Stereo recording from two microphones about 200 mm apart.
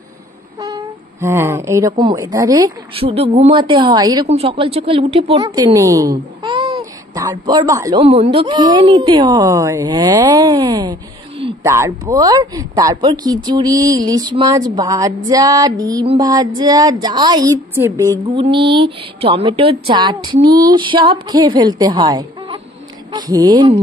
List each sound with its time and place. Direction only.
0.6 s speech: 15° right (ahead or behind)
3.1 s speech: 30° right (ahead or behind)
5.4 s a sound: 20° right (ahead or behind)
7.2 s speech: 20° right (ahead or behind)
8.0 s speech: 30° right (ahead or behind)
11.6 s speech: 15° right (ahead or behind)
18.3 s speech: 25° right (ahead or behind)